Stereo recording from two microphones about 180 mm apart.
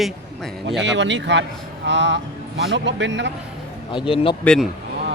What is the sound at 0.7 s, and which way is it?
Speech, 90° right.